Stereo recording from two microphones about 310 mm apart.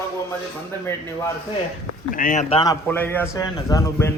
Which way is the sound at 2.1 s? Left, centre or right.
Left.